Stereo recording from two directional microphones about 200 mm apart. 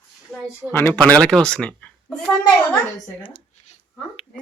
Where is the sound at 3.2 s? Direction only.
25° left (ahead or behind).